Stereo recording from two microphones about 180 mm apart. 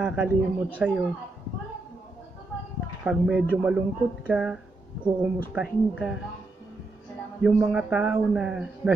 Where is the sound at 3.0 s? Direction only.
5° right (ahead or behind).